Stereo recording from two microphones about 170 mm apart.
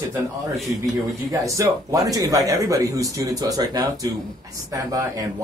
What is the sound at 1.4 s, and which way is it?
Speech, 20° right (ahead or behind).